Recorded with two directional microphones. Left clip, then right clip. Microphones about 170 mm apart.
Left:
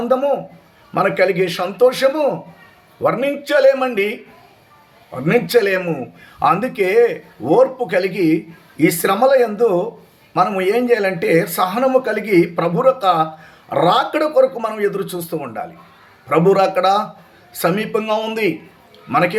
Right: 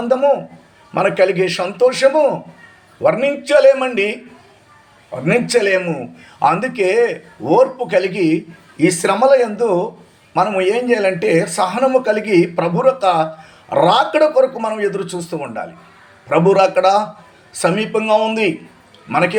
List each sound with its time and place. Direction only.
0.0 s a man's voice: 20° left (ahead or behind)
5.2 s speech: 15° left (ahead or behind)